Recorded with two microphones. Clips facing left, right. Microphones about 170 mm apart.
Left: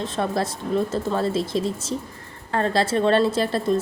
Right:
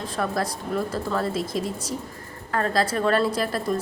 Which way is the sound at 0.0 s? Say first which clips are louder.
Left 2 dB; 25° left (ahead or behind).